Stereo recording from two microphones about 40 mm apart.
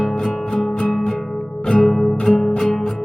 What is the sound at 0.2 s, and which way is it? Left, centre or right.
Music, centre.